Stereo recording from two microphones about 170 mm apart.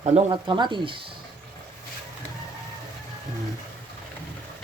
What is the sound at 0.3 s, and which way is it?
Speech, 25° right (ahead or behind).